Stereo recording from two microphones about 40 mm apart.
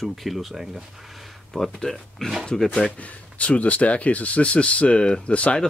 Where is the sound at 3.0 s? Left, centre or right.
Left.